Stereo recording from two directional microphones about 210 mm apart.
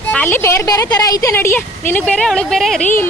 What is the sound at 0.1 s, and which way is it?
Speech, 10° left (ahead or behind).